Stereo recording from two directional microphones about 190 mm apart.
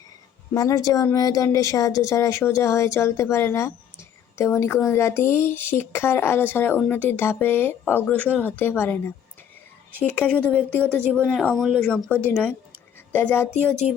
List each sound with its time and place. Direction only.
0.5 s speech: 20° left (ahead or behind)